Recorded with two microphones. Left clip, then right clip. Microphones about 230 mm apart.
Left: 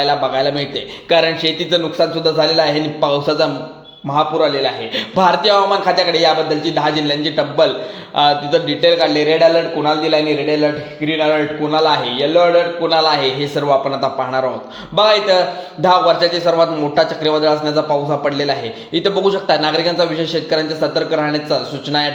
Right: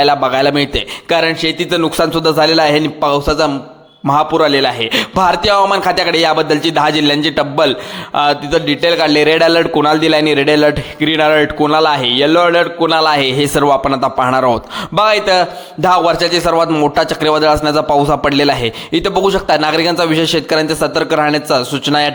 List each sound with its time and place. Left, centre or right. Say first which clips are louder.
0.0 s a man's voice: right 4 dB; right